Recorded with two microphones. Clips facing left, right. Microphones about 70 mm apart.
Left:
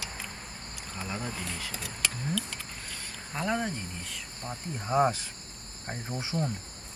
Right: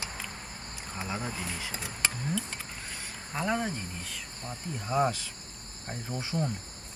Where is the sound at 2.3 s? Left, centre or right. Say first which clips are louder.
Even; right.